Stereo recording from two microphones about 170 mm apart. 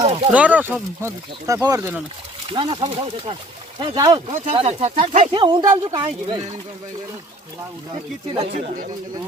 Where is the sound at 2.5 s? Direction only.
30° right (ahead or behind).